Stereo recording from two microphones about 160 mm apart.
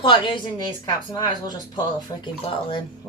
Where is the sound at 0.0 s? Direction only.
30° left (ahead or behind).